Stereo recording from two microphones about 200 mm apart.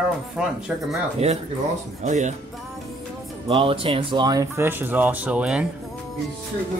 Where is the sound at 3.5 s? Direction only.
25° right (ahead or behind); by 5.7 s 5° right (ahead or behind).